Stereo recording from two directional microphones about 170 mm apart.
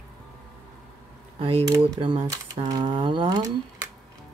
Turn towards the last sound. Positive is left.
turn(degrees=-20)  # may be behind; listen again after turning